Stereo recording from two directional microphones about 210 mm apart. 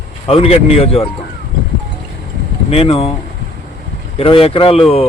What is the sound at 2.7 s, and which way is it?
Speech, 30° left (ahead or behind).